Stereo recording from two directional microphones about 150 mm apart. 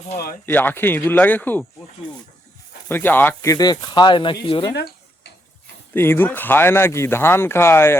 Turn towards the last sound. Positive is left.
turn(degrees=15)  # may be behind; listen again after turning